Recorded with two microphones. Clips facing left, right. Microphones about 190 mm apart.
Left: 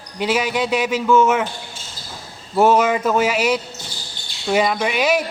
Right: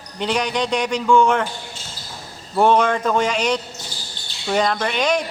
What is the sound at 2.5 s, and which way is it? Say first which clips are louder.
Speech: left 1 dB; 5° left (ahead or behind).